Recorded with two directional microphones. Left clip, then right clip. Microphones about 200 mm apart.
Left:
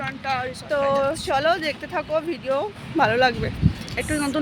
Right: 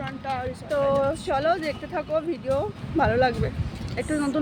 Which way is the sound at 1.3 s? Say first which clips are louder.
Left 3 dB; 5° left (ahead or behind).